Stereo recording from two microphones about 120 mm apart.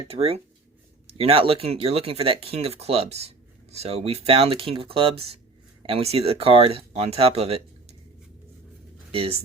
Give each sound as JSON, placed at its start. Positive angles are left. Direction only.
{"t": 0.1, "sound": "speech", "side_deg": -55}
{"t": 9.1, "sound": "speech", "side_deg": -50}